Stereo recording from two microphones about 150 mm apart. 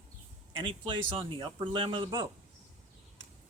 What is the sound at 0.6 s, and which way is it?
A man's voice, 35° right (ahead or behind).